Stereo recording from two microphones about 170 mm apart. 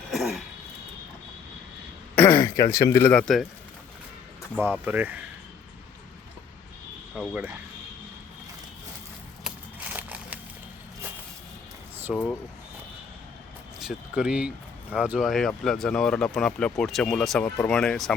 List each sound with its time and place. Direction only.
0.1 s a sound: centre (ahead or behind)
2.1 s a man's voice: 10° left (ahead or behind)
4.5 s speech: 10° right (ahead or behind)
7.2 s speech: 5° right (ahead or behind)
9.9 s crushing: 10° right (ahead or behind)
12.1 s speech: 5° left (ahead or behind)
13.7 s speech: 5° right (ahead or behind)